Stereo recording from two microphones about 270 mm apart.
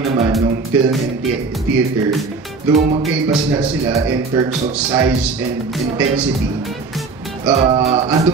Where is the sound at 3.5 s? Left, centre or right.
Centre.